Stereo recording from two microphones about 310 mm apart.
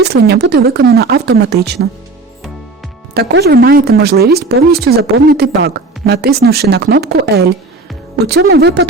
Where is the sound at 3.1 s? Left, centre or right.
Right.